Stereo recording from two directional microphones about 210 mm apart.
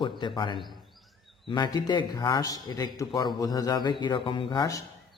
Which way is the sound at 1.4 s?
20° left (ahead or behind).